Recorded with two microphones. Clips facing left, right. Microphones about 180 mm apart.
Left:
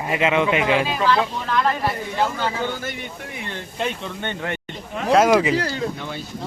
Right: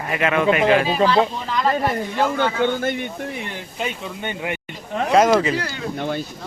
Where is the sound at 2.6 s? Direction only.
60° right (ahead or behind).